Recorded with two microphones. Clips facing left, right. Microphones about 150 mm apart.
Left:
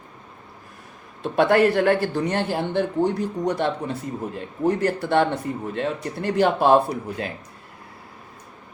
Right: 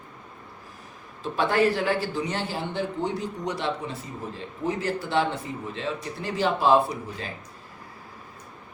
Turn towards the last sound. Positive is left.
turn(degrees=55)  # may be behind; listen again after turning